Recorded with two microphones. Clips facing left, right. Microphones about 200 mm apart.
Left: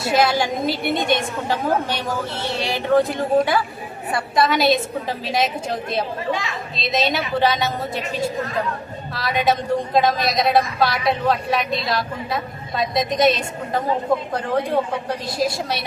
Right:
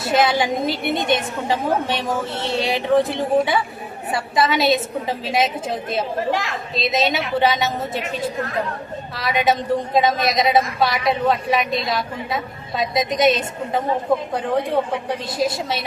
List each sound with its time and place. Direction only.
0.0 s a woman's voice: centre (ahead or behind)
9.1 s a woman's voice: centre (ahead or behind)